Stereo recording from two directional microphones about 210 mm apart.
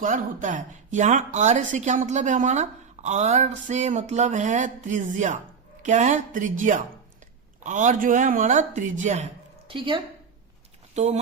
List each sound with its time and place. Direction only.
0.0 s a woman's voice: 40° right (ahead or behind)
9.6 s a woman's voice: 25° right (ahead or behind)